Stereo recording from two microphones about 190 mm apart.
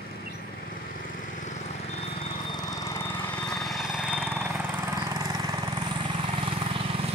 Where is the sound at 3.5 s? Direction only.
Centre (ahead or behind).